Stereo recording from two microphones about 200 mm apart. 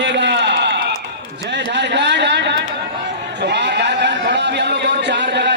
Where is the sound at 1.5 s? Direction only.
60° right (ahead or behind).